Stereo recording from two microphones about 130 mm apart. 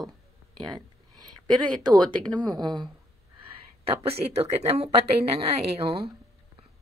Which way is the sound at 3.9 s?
50° right (ahead or behind).